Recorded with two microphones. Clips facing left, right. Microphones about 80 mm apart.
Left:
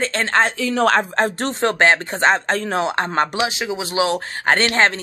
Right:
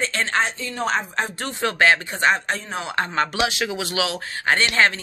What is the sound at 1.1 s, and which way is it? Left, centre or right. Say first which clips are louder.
Speech: left 6 dB; left.